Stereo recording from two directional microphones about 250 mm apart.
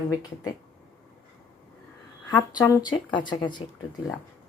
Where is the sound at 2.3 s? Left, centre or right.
Centre.